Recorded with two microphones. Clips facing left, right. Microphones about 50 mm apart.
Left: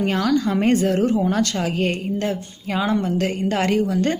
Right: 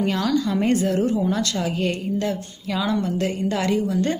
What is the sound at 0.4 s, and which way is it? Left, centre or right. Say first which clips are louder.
A woman's voice: left 2 dB; left.